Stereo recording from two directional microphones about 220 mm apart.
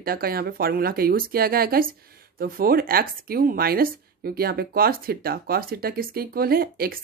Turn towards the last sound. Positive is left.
turn(degrees=-45)  # may be behind; listen again after turning